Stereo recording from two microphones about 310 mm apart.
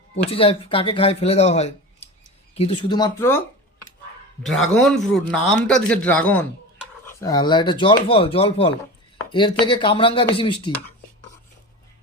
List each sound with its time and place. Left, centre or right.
0.3 s speech: centre
4.4 s speech: centre